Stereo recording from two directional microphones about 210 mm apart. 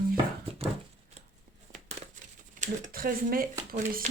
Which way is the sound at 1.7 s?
35° right (ahead or behind).